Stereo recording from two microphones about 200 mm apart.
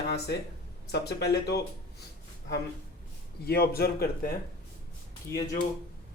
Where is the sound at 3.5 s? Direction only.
50° left (ahead or behind).